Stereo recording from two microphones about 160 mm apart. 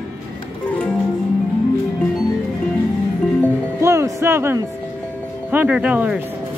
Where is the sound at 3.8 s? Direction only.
20° right (ahead or behind).